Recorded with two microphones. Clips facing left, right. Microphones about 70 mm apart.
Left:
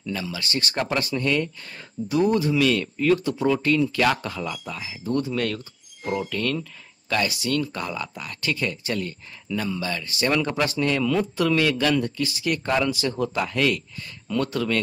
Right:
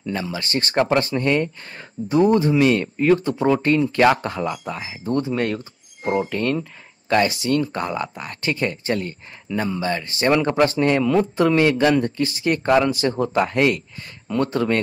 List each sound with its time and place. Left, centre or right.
0.0 s speech: right